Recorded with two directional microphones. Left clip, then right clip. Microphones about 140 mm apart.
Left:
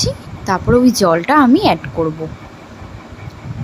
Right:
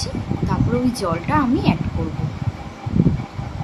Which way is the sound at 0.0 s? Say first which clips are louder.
Left 6 dB; 60° left (ahead or behind).